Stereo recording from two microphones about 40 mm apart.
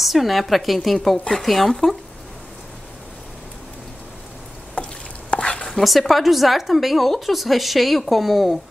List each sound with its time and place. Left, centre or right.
0.0 s speech: centre
5.4 s a sound: left
5.7 s speech: centre